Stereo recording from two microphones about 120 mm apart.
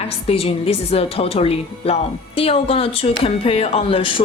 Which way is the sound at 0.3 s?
55° left (ahead or behind).